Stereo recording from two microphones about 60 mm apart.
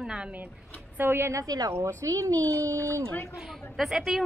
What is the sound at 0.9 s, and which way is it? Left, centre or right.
Speech, right.